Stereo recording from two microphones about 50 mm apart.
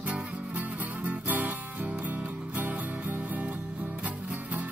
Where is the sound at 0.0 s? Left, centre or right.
Right.